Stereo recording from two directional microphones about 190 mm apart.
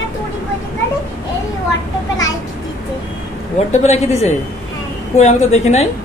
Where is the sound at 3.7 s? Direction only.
35° left (ahead or behind).